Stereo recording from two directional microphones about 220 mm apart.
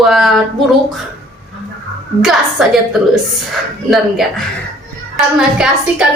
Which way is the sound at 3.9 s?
Centre (ahead or behind).